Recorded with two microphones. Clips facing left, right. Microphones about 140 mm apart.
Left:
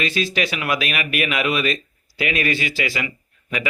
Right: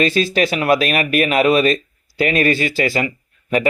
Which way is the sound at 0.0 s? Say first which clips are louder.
Right 7 dB; 40° right (ahead or behind).